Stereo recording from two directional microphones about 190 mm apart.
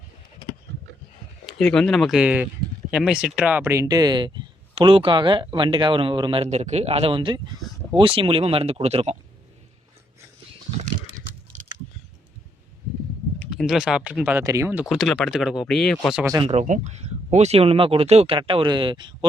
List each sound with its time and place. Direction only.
1.5 s speech: 5° left (ahead or behind); by 9.1 s 35° right (ahead or behind)
13.6 s speech: 5° right (ahead or behind)
16.4 s speech: 35° right (ahead or behind)